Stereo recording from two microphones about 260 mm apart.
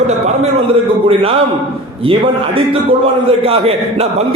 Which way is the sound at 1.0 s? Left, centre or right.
Right.